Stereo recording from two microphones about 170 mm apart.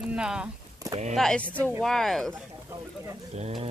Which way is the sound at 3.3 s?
40° right (ahead or behind).